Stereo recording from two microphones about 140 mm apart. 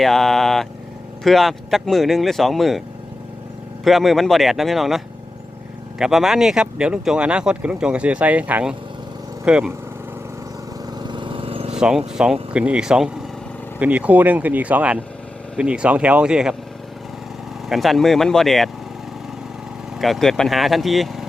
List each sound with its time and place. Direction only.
0.0 s speech: centre (ahead or behind)
3.8 s speech: centre (ahead or behind)
11.0 s vehicle: 35° right (ahead or behind)
11.8 s speech: 5° right (ahead or behind)
17.7 s speech: centre (ahead or behind)
20.0 s speech: centre (ahead or behind)